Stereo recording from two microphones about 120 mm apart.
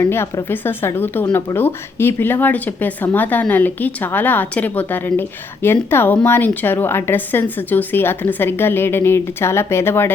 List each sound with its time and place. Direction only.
0.0 s a woman's voice: 20° left (ahead or behind)